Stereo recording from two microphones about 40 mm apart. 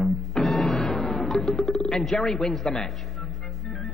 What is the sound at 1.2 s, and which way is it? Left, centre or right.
Speech, centre.